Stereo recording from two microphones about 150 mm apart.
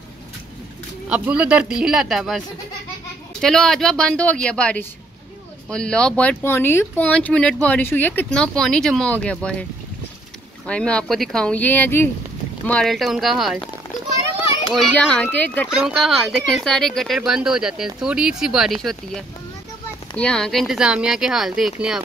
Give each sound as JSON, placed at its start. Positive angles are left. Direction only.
{"t": 1.0, "sound": "speech", "side_deg": -10}
{"t": 10.7, "sound": "speech", "side_deg": 5}
{"t": 15.0, "sound": "speech", "side_deg": 5}
{"t": 15.8, "sound": "speech", "side_deg": 0}